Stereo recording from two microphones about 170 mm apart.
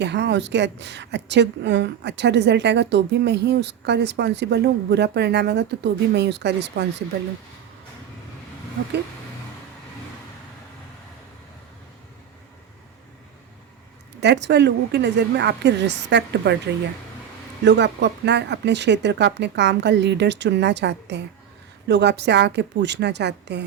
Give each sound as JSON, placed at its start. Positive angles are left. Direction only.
{"t": 0.0, "sound": "a woman's voice", "side_deg": -90}
{"t": 14.2, "sound": "a woman's voice", "side_deg": -90}
{"t": 17.6, "sound": "a woman's voice", "side_deg": -90}